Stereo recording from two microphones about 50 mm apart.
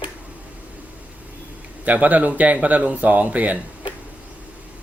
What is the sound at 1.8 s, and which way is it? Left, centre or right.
Speech, right.